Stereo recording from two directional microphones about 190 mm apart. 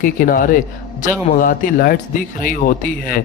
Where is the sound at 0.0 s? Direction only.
45° left (ahead or behind).